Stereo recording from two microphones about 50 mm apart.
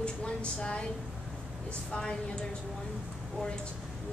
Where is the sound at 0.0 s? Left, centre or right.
Centre.